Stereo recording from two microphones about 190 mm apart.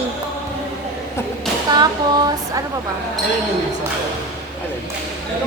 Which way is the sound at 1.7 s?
20° right (ahead or behind).